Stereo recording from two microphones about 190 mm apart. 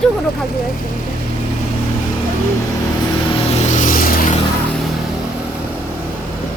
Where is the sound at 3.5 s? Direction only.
35° left (ahead or behind).